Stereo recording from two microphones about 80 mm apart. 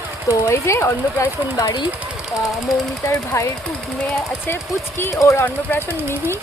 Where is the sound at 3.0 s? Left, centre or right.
Left.